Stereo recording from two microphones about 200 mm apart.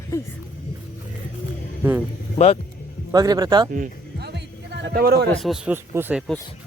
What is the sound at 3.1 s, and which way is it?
Speech, 20° right (ahead or behind).